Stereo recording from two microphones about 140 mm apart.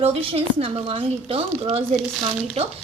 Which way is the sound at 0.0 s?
40° right (ahead or behind).